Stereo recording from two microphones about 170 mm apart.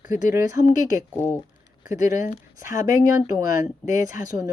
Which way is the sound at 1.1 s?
15° left (ahead or behind).